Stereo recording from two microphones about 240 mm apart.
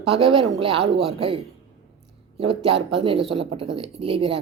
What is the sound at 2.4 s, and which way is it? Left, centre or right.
Speech, right.